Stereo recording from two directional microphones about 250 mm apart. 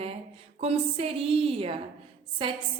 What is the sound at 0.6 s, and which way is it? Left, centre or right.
A woman's voice, right.